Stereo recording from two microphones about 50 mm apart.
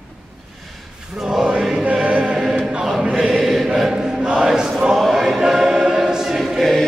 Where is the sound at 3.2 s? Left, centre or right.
Centre.